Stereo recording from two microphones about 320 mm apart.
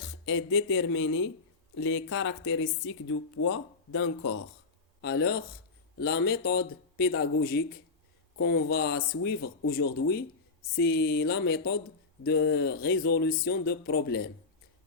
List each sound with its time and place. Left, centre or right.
0.0 s speech: left